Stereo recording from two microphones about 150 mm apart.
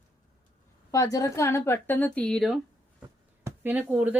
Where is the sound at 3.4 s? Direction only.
10° right (ahead or behind).